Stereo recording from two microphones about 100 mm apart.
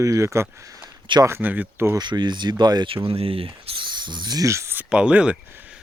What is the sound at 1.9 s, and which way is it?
Speech, 50° right (ahead or behind).